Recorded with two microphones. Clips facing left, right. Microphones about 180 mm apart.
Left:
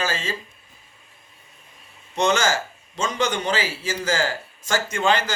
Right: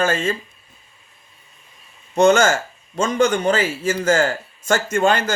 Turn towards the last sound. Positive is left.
turn(degrees=-50)  # may be behind; listen again after turning